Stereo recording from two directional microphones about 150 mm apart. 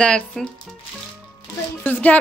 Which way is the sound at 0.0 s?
5° left (ahead or behind).